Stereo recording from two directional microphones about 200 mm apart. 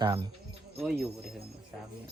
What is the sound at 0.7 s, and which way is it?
Speech, centre (ahead or behind).